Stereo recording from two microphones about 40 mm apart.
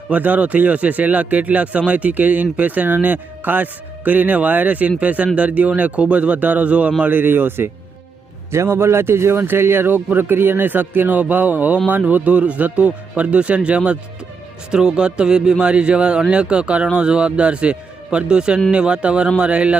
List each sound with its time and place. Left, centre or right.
0.1 s speech: right
7.1 s speech: right
8.6 s a man's voice: right